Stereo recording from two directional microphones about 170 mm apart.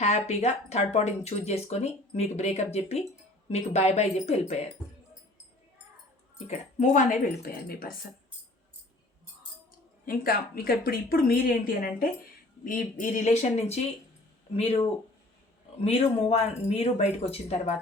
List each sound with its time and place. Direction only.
0.0 s speech: 40° left (ahead or behind)
6.5 s speech: 45° left (ahead or behind)
10.1 s a woman's voice: 60° left (ahead or behind); by 17.7 s 35° left (ahead or behind)